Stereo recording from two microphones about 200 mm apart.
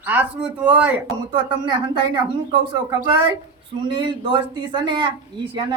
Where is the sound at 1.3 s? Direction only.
25° right (ahead or behind).